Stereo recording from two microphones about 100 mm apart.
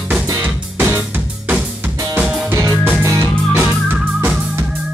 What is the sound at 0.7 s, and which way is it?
Music, 20° right (ahead or behind).